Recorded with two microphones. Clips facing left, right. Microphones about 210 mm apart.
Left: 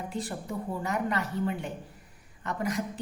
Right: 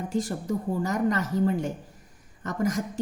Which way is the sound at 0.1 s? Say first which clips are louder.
Right 7 dB; 45° right (ahead or behind).